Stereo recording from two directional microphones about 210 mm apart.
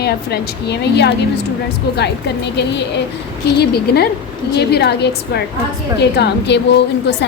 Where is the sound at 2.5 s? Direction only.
55° left (ahead or behind).